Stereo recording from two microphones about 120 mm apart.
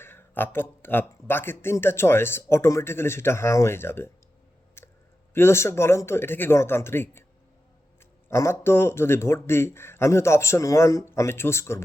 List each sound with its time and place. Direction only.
0.0 s speech: 20° left (ahead or behind)
4.8 s clicking: 20° left (ahead or behind)
5.3 s speech: 20° left (ahead or behind)
8.3 s speech: 20° left (ahead or behind)